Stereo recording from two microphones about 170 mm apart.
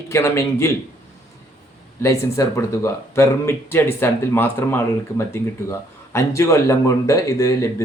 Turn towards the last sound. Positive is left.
turn(degrees=20)  # may be behind; listen again after turning